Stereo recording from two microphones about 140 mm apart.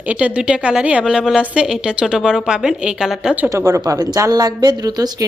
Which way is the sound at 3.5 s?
20° right (ahead or behind).